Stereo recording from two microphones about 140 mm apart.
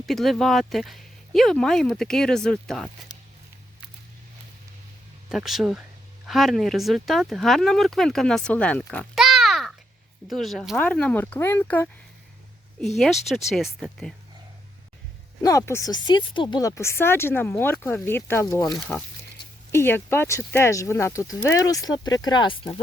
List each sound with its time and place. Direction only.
0.0 s speech: centre (ahead or behind)
5.3 s speech: centre (ahead or behind)
9.1 s pig: 5° right (ahead or behind)
10.2 s speech: centre (ahead or behind)
12.8 s speech: centre (ahead or behind)
15.4 s speech: 25° left (ahead or behind)
15.9 s speech: 35° left (ahead or behind); by 18.4 s 15° left (ahead or behind)
18.4 s speech: 30° left (ahead or behind)
19.7 s speech: 15° left (ahead or behind); by 22.8 s 40° left (ahead or behind)